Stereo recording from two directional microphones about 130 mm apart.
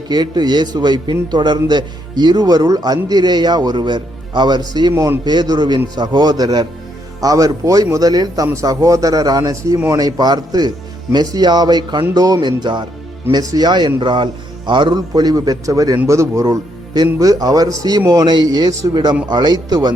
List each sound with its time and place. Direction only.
0.1 s a man's voice: 30° right (ahead or behind)